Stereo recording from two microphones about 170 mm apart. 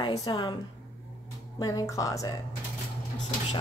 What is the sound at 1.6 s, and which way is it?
Speech, 20° left (ahead or behind).